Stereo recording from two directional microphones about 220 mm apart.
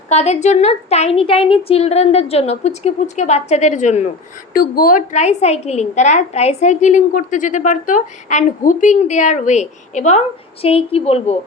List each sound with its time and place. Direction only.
0.1 s a woman's voice: 30° left (ahead or behind)